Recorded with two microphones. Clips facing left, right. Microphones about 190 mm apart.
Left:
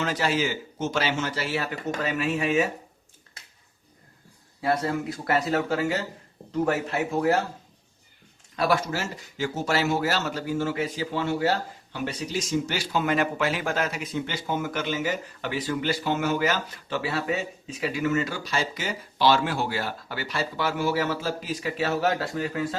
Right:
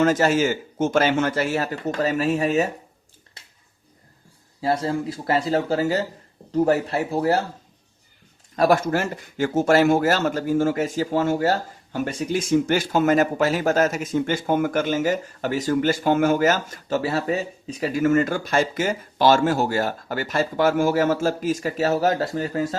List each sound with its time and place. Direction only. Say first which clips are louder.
0.0 s speech: right 7 dB; 45° right (ahead or behind)
4.6 s speech: right 3 dB; 30° right (ahead or behind)
8.5 s speech: right 6 dB; 45° right (ahead or behind)